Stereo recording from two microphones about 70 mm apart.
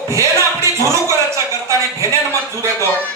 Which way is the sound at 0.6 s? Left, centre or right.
Right.